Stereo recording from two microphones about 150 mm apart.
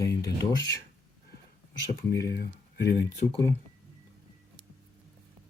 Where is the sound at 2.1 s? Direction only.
25° left (ahead or behind).